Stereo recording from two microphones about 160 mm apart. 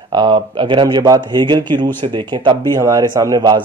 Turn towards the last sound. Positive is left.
turn(degrees=-25)  # may be behind; listen again after turning